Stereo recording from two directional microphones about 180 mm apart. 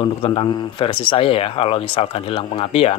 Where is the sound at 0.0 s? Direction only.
30° left (ahead or behind).